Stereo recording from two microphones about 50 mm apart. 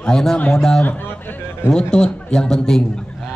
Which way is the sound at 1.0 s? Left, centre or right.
Left.